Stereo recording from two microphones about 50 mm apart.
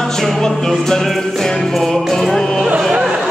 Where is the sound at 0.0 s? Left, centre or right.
Centre.